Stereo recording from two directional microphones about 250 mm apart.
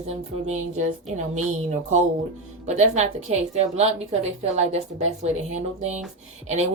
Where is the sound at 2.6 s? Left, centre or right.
Right.